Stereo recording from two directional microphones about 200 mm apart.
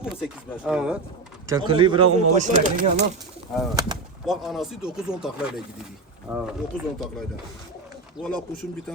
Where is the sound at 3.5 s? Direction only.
Centre (ahead or behind).